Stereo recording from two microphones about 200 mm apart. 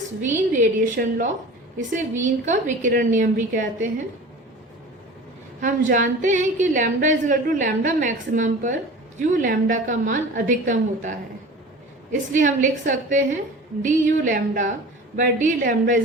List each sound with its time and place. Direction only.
0.2 s a woman's voice: 40° right (ahead or behind)
5.5 s a woman's voice: 40° right (ahead or behind)
12.3 s a woman's voice: 40° right (ahead or behind)